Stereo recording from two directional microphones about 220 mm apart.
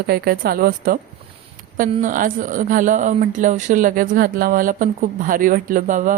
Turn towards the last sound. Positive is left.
turn(degrees=-35)  # may be behind; listen again after turning